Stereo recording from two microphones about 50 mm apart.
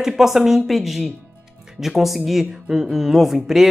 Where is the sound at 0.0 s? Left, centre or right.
Centre.